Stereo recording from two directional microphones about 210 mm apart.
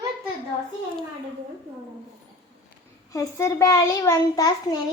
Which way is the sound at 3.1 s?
15° left (ahead or behind).